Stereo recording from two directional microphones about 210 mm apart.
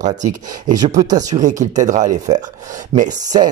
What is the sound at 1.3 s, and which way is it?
Speech, 35° right (ahead or behind).